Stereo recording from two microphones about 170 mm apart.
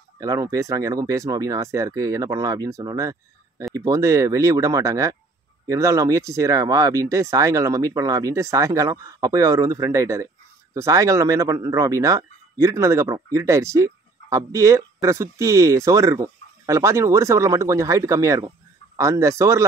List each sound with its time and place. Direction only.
0.2 s speech: 20° right (ahead or behind)